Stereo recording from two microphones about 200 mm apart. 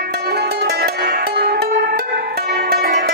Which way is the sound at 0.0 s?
55° right (ahead or behind).